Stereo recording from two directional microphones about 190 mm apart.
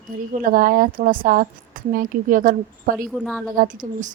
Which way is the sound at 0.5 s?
50° right (ahead or behind).